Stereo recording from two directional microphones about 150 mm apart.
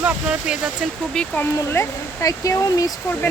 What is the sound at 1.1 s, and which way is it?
Speech, 5° left (ahead or behind).